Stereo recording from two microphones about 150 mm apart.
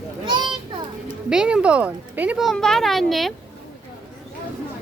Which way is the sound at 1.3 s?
5° right (ahead or behind).